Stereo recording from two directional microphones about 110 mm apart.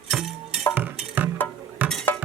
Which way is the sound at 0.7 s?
15° right (ahead or behind).